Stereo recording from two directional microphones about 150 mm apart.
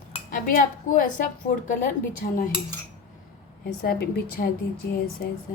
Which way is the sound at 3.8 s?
90° left.